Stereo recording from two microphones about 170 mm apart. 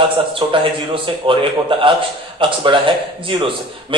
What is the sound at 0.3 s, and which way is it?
A man's voice, 30° right (ahead or behind).